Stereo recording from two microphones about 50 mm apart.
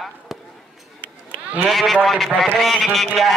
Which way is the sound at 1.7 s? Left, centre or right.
Centre.